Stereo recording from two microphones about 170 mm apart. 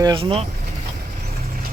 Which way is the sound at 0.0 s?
30° right (ahead or behind).